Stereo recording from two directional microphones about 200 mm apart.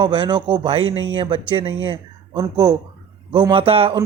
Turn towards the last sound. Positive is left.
turn(degrees=-30)  # may be behind; listen again after turning